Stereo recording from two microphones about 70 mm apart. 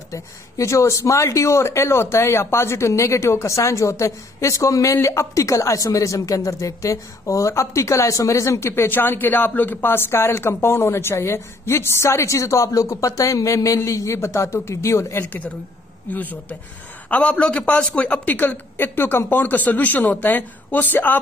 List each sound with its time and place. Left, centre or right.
0.1 s speech: left
16.1 s a man's voice: left